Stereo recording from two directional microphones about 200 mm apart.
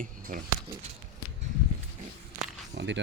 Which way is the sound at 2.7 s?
60° right (ahead or behind).